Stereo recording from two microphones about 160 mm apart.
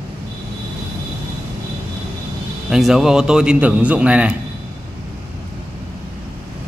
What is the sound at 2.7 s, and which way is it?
A man's voice, 5° right (ahead or behind).